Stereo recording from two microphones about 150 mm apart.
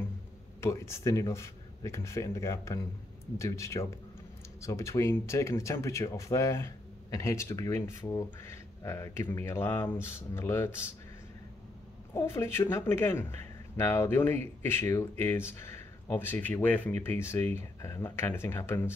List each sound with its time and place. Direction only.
0.6 s speech: 20° left (ahead or behind)
12.1 s speech: 15° left (ahead or behind)